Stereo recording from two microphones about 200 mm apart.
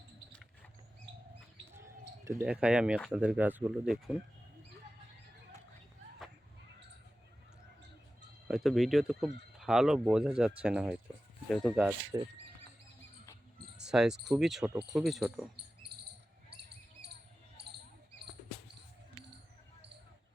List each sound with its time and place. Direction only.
1.7 s speech: 15° right (ahead or behind)
8.4 s speech: centre (ahead or behind)
12.1 s speech: 15° right (ahead or behind)
13.8 s speech: 5° right (ahead or behind)
15.9 s cricket: 55° right (ahead or behind)
16.6 s basketball bounce: 55° right (ahead or behind)